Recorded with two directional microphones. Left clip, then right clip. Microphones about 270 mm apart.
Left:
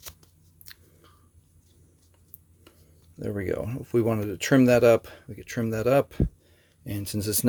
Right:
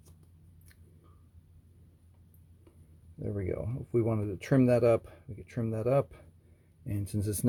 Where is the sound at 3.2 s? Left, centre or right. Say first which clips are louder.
Left 6 dB; centre.